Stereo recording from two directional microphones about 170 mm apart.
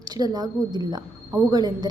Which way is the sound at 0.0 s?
25° right (ahead or behind).